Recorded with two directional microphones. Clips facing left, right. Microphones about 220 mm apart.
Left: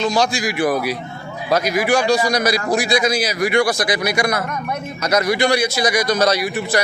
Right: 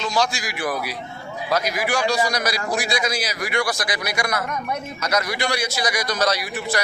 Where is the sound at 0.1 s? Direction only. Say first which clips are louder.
Left 5 dB; 20° left (ahead or behind).